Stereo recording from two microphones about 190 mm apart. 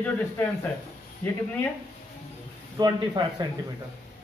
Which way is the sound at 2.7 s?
20° right (ahead or behind).